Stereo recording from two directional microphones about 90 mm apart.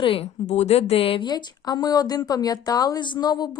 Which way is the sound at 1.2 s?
50° left (ahead or behind).